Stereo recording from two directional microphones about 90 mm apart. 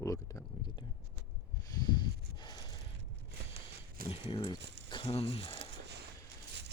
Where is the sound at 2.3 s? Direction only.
55° left (ahead or behind).